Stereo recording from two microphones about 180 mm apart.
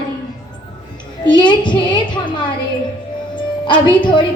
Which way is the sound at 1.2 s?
25° left (ahead or behind).